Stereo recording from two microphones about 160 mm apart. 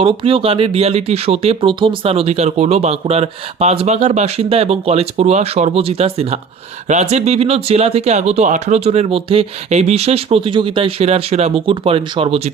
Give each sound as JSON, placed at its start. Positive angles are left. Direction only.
{"t": 0.0, "sound": "speech", "side_deg": -35}